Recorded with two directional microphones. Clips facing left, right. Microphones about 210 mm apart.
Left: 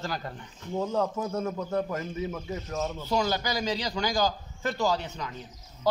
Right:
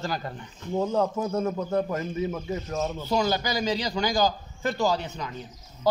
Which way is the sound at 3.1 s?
5° right (ahead or behind).